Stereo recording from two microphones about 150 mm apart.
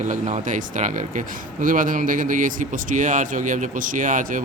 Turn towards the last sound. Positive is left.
turn(degrees=-60)  # may be behind; listen again after turning